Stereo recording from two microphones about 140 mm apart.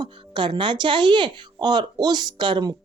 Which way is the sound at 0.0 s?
35° right (ahead or behind).